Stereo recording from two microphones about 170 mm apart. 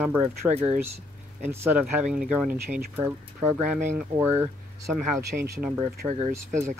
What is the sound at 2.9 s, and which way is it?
Speech, 15° right (ahead or behind).